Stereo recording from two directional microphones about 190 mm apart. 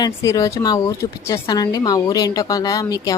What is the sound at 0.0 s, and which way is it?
Speech, 15° left (ahead or behind).